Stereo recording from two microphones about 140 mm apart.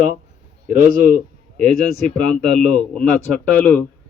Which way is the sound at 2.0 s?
5° left (ahead or behind).